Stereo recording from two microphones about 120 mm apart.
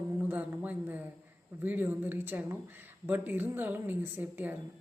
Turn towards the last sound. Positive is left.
turn(degrees=-15)  # may be behind; listen again after turning